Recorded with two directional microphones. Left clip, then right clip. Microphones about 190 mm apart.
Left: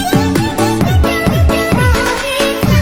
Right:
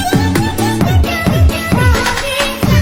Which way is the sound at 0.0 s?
Centre (ahead or behind).